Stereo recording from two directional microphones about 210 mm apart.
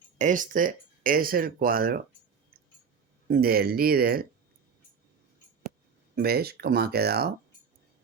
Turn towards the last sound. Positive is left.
turn(degrees=-50)  # may be behind; listen again after turning